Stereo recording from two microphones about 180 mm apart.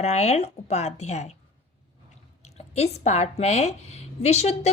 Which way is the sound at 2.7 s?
35° left (ahead or behind).